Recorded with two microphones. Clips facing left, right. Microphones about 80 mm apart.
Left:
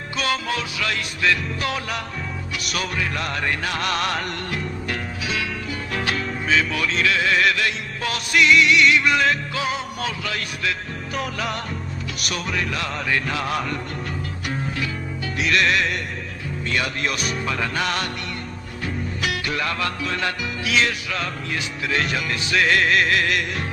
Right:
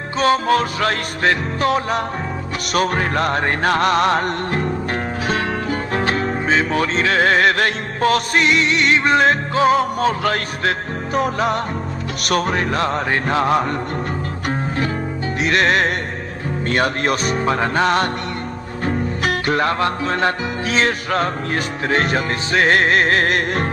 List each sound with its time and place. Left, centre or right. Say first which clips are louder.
0.2 s music: right 9 dB; right
15.4 s music: right 4 dB; right